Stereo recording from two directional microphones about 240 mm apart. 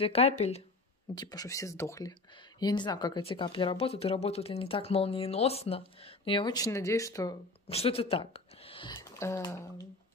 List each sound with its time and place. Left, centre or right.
0.0 s speech: left
1.1 s speech: centre
7.6 s speech: left
8.9 s speech: centre